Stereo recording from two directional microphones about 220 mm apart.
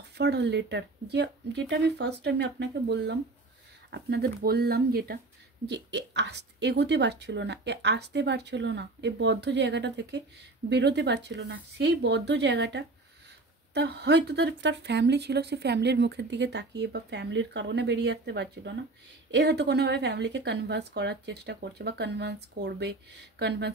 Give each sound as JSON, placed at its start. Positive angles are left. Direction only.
{"t": 0.2, "sound": "speech", "side_deg": -50}